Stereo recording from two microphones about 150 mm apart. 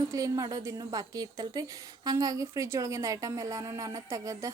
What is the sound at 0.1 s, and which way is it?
A woman's voice, 25° right (ahead or behind).